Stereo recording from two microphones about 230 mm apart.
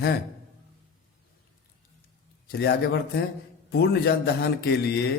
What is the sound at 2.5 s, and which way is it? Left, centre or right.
A man's voice, left.